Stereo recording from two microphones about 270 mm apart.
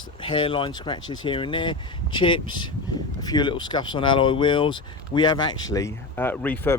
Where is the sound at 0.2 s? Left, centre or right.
Centre.